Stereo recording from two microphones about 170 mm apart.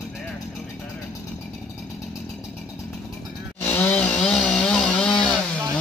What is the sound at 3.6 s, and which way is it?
Chainsaw, 10° left (ahead or behind).